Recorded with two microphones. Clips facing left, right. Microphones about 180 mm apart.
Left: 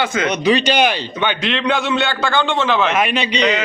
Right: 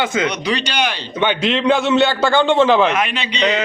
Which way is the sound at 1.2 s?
30° right (ahead or behind).